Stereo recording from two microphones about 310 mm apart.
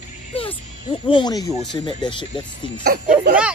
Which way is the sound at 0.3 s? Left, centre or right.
Centre.